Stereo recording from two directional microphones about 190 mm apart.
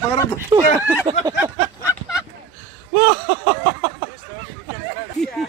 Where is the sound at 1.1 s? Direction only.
20° right (ahead or behind).